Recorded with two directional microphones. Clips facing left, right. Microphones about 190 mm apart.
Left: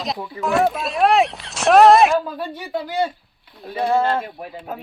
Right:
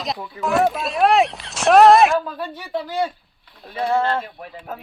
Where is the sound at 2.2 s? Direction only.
15° left (ahead or behind).